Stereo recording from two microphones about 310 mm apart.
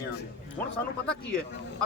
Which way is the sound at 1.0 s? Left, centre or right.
Centre.